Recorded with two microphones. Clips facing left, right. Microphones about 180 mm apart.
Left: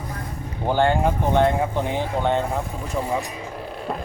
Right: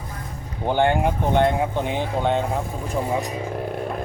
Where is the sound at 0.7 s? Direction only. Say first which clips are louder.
Even; 15° right (ahead or behind).